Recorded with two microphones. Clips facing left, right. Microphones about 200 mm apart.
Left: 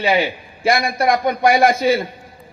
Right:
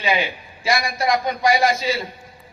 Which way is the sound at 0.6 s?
55° left (ahead or behind).